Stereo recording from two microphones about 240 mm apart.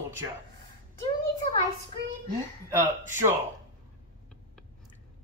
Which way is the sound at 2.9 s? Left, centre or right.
Left.